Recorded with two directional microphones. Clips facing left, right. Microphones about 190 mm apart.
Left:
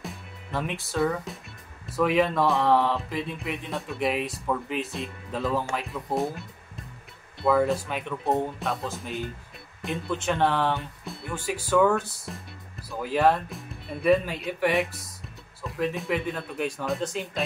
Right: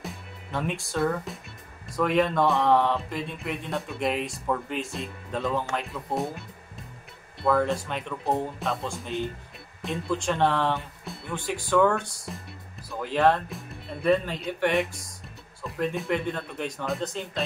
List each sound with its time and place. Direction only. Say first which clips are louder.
0.0 s music: even; centre (ahead or behind)
1.9 s speech: left 1 dB; 5° left (ahead or behind)
7.4 s speech: left 1 dB; 5° left (ahead or behind)